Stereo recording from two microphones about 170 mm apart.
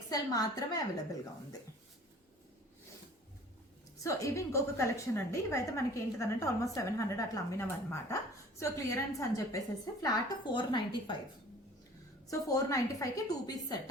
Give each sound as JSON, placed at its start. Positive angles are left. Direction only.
{"t": 0.1, "sound": "a woman's voice", "side_deg": 20}
{"t": 4.0, "sound": "a woman's voice", "side_deg": 20}
{"t": 12.3, "sound": "a woman's voice", "side_deg": 20}